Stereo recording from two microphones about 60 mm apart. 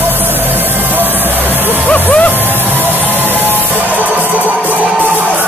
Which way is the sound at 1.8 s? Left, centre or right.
Centre.